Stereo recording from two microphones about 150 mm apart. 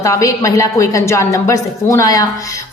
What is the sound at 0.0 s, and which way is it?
A woman's voice, 20° left (ahead or behind).